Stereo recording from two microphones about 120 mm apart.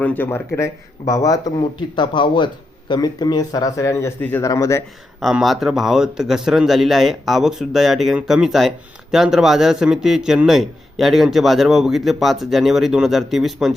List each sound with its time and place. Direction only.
0.0 s speech: 15° left (ahead or behind)
5.2 s a man's voice: centre (ahead or behind)